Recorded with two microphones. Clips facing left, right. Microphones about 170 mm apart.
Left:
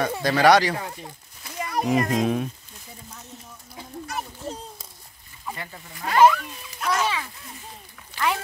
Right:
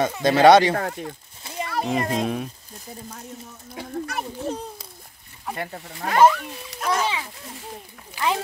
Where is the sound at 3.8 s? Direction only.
65° right (ahead or behind).